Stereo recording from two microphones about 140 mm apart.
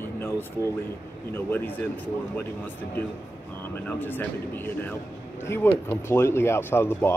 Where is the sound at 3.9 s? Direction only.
15° left (ahead or behind).